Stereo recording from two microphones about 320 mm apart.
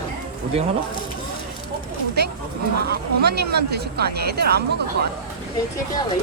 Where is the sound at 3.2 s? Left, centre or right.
Right.